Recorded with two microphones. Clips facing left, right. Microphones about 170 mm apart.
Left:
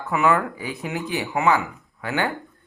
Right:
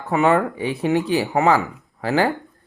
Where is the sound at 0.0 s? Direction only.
30° right (ahead or behind).